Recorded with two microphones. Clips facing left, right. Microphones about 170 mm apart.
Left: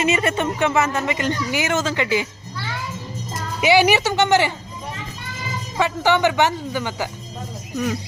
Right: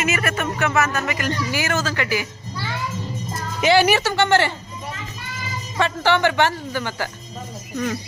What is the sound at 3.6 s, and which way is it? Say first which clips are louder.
Speech: left 1 dB; 15° left (ahead or behind).